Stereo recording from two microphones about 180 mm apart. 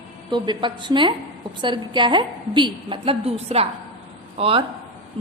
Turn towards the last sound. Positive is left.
turn(degrees=-30)  # may be behind; listen again after turning